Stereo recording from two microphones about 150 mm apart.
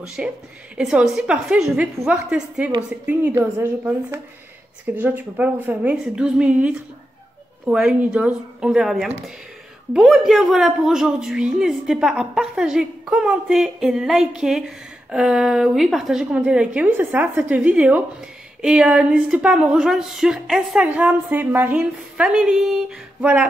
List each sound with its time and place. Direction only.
0.0 s a woman's voice: 5° right (ahead or behind)